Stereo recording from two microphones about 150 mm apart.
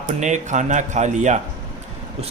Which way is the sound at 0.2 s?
55° right (ahead or behind).